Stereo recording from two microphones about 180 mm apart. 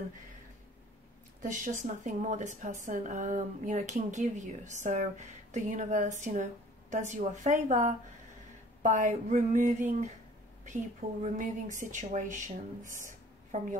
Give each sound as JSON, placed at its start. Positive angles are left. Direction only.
{"t": 1.4, "sound": "speech", "side_deg": -45}